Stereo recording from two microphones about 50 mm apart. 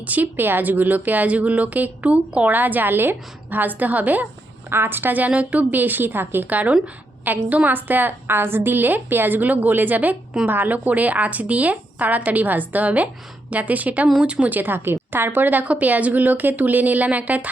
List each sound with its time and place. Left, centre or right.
0.0 s speech: right
4.7 s a woman's voice: right
5.3 s speech: right
14.1 s speech: right
14.5 s a woman's voice: right